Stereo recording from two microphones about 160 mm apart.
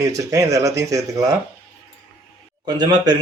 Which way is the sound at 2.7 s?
25° right (ahead or behind).